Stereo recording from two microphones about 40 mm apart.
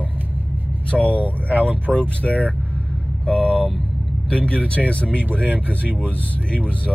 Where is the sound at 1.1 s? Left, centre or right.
Left.